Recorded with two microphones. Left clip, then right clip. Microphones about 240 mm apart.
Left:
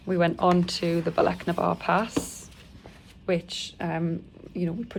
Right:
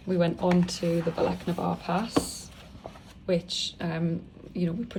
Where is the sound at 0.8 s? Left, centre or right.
Left.